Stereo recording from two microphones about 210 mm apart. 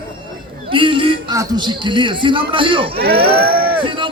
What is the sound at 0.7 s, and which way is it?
A man's voice, 25° right (ahead or behind).